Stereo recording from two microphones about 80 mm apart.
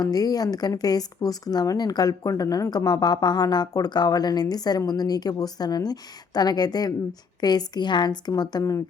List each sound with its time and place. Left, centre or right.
0.0 s a woman's voice: left
8.4 s speech: left